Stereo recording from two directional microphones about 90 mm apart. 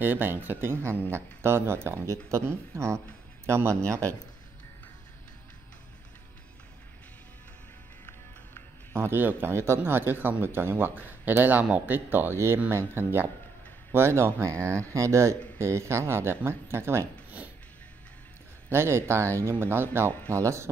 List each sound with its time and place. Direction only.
0.0 s speech: 25° right (ahead or behind)
8.9 s speech: 25° right (ahead or behind)
18.7 s speech: 30° right (ahead or behind)